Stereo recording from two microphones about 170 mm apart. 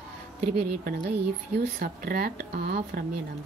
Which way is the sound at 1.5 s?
65° right (ahead or behind).